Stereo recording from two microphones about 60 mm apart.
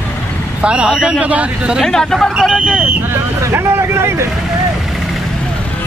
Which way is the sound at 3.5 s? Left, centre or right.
Right.